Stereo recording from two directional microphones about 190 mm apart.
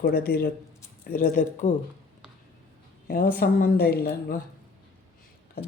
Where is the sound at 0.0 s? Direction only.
55° left (ahead or behind).